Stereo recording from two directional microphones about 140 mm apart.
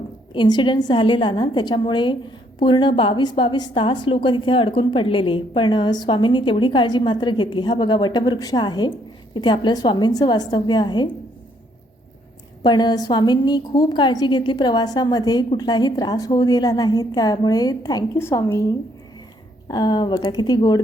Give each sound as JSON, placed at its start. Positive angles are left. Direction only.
{"t": 0.3, "sound": "a woman's voice", "side_deg": 30}
{"t": 12.6, "sound": "a woman's voice", "side_deg": 30}
{"t": 18.2, "sound": "a woman's voice", "side_deg": 15}
{"t": 19.6, "sound": "a woman's voice", "side_deg": 30}